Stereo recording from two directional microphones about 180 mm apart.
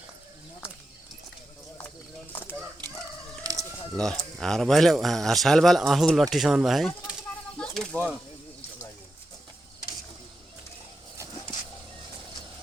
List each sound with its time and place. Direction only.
2.3 s fowl: 10° left (ahead or behind)
3.4 s chicken: 20° right (ahead or behind)
3.9 s speech: 5° left (ahead or behind)
6.3 s a sound: centre (ahead or behind)